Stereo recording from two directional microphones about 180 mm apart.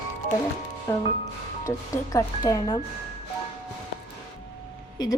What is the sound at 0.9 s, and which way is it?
Speech, 20° left (ahead or behind).